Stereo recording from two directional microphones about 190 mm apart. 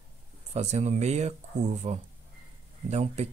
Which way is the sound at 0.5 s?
35° right (ahead or behind).